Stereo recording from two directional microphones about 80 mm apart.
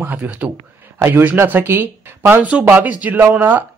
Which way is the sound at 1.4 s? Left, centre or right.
Right.